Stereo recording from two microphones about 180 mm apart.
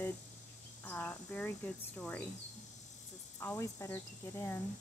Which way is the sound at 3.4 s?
15° left (ahead or behind).